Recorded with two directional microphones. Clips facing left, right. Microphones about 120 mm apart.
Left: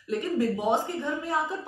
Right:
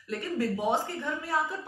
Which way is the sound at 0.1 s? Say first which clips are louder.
Left 4 dB; 20° left (ahead or behind).